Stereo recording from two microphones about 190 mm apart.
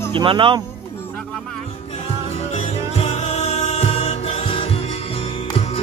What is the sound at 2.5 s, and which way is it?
Music, 35° left (ahead or behind).